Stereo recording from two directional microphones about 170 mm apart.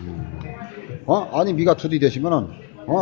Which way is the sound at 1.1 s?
20° left (ahead or behind).